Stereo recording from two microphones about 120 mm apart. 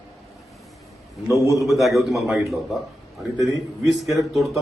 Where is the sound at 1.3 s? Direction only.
30° left (ahead or behind).